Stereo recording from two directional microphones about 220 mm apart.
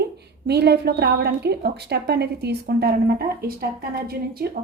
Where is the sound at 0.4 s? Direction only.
50° right (ahead or behind).